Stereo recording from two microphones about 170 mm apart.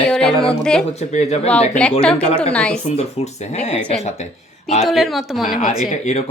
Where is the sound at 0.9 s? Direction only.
40° left (ahead or behind).